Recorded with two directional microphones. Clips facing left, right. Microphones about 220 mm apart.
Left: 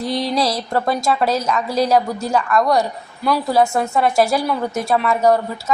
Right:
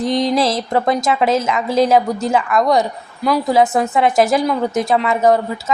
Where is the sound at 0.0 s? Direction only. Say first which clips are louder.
Right 4 dB; 20° right (ahead or behind).